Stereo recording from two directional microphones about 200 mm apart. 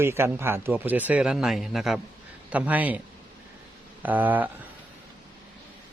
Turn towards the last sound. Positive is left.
turn(degrees=-10)  # may be behind; listen again after turning